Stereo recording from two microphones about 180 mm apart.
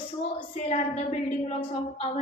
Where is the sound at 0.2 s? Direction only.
35° left (ahead or behind).